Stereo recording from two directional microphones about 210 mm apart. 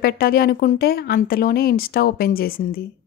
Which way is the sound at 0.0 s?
45° left (ahead or behind).